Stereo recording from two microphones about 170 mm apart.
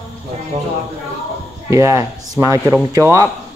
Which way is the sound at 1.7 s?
15° right (ahead or behind).